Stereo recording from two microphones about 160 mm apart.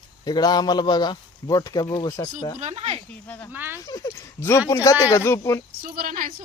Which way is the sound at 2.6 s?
40° right (ahead or behind).